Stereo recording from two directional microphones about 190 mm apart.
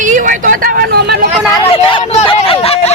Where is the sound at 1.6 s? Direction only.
30° left (ahead or behind).